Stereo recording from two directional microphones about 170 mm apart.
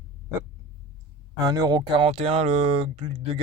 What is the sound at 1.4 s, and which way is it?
Speech, 20° right (ahead or behind).